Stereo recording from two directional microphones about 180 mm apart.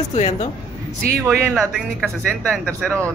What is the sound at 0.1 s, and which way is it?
Speech, 40° left (ahead or behind).